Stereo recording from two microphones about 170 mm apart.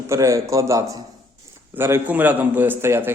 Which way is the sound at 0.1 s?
20° right (ahead or behind).